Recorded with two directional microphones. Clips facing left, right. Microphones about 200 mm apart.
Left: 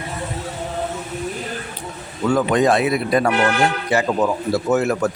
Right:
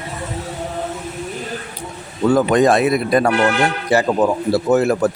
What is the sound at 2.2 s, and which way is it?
A man's voice, 40° right (ahead or behind).